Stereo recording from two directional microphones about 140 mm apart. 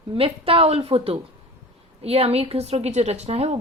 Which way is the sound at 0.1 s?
40° right (ahead or behind).